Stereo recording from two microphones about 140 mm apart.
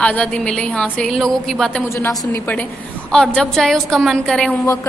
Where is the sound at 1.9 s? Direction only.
20° left (ahead or behind).